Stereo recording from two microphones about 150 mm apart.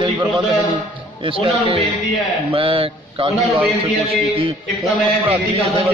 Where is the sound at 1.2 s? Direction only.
35° right (ahead or behind).